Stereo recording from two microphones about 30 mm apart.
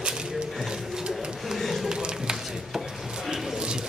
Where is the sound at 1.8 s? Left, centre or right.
Right.